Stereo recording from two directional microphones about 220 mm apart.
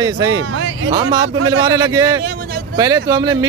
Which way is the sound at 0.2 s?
70° right (ahead or behind).